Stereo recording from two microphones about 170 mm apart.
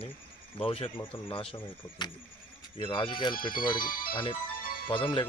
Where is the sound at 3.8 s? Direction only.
55° left (ahead or behind).